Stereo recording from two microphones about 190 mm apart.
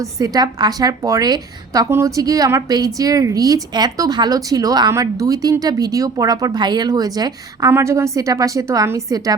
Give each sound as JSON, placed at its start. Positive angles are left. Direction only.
{"t": 0.0, "sound": "a woman's voice", "side_deg": -20}